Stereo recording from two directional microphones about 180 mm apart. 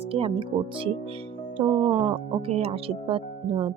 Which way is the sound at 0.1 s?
30° right (ahead or behind).